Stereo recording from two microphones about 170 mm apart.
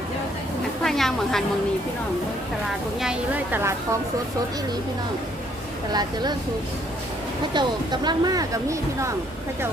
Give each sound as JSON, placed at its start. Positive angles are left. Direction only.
{"t": 0.9, "sound": "speech", "side_deg": 0}
{"t": 3.0, "sound": "a woman's voice", "side_deg": -5}
{"t": 5.9, "sound": "speech", "side_deg": -25}
{"t": 7.5, "sound": "speech", "side_deg": -25}